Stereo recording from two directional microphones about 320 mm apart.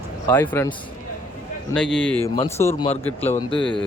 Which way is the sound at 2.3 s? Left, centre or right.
Centre.